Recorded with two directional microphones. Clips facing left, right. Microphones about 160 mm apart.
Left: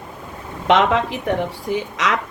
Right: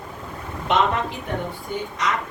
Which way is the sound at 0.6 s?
90° left.